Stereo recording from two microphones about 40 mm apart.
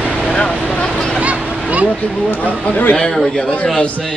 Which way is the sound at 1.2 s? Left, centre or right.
Right.